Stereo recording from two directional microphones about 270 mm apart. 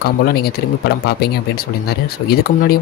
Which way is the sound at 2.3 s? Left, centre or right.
Left.